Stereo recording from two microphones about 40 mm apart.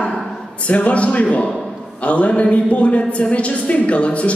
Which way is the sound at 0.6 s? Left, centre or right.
Left.